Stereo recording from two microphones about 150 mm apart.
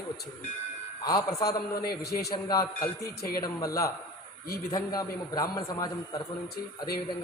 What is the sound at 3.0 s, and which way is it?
Speech, 90° left.